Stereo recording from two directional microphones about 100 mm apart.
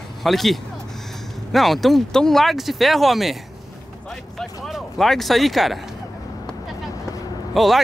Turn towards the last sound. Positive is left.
turn(degrees=0)  # may be behind; listen again after turning